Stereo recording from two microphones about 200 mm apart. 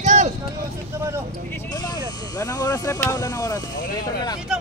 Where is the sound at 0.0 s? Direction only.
35° right (ahead or behind).